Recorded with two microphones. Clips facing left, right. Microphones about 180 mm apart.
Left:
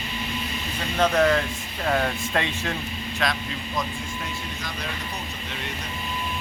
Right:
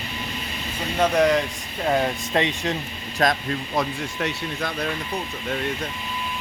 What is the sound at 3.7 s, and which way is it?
Speech, 65° right (ahead or behind).